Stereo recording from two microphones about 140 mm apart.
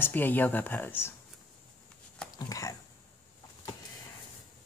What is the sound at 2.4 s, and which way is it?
Speech, 25° left (ahead or behind).